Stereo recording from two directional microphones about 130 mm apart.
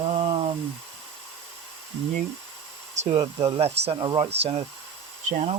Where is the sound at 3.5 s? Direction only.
50° right (ahead or behind).